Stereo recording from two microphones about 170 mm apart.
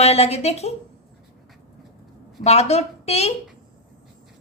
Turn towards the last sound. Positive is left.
turn(degrees=40)  # may be behind; listen again after turning